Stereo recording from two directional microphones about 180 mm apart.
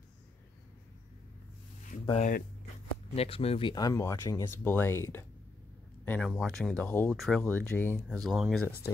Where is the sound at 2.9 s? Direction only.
30° left (ahead or behind); by 8.0 s 10° left (ahead or behind).